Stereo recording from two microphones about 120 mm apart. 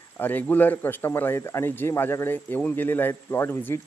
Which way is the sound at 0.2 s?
15° left (ahead or behind).